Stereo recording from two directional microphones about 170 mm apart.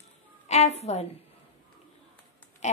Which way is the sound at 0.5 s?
40° left (ahead or behind).